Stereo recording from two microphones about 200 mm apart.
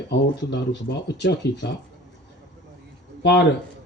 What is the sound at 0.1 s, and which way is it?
Speech, 60° left (ahead or behind).